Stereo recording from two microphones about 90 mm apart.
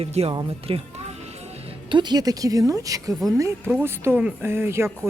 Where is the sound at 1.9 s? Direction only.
55° right (ahead or behind); by 3.7 s 35° right (ahead or behind).